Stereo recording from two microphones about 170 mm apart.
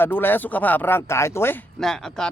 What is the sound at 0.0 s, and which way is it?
Speech, 10° left (ahead or behind).